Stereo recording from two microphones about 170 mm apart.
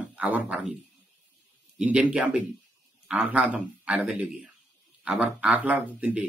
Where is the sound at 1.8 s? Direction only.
5° right (ahead or behind).